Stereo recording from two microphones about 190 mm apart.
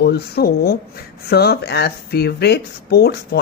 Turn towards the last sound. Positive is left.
turn(degrees=55)  # may be behind; listen again after turning